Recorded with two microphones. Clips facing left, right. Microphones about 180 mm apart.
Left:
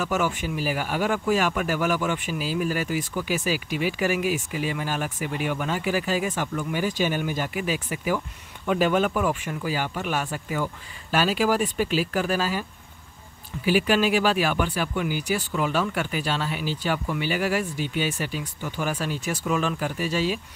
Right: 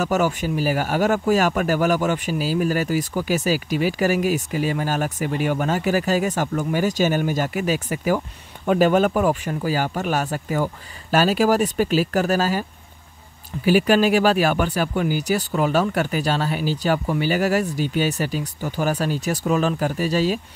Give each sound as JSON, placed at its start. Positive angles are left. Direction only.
{"t": 0.0, "sound": "speech", "side_deg": -40}
{"t": 13.7, "sound": "speech", "side_deg": -45}